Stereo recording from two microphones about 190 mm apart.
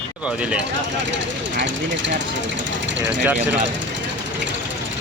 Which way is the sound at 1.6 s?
75° right (ahead or behind).